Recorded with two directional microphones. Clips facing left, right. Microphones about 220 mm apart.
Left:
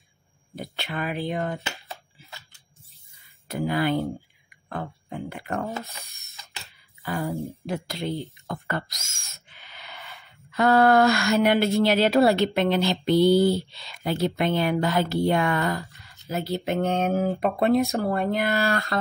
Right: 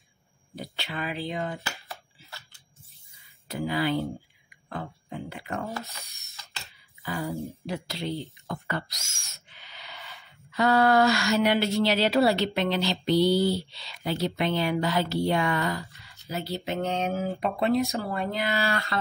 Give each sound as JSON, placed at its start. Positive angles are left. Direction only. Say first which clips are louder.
{"t": 0.6, "sound": "speech", "louder": "left 3 dB", "side_deg": 50}
{"t": 3.4, "sound": "speech", "louder": "left 3 dB", "side_deg": 50}
{"t": 6.0, "sound": "mechanisms", "louder": "even", "side_deg": 0}
{"t": 7.1, "sound": "speech", "louder": "left 3 dB", "side_deg": 50}
{"t": 9.3, "sound": "a sound", "louder": "left 1 dB", "side_deg": 50}
{"t": 16.0, "sound": "speech", "louder": "left 4 dB", "side_deg": 50}